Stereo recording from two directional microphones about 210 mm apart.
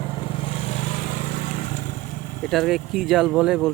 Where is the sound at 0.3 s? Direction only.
25° left (ahead or behind).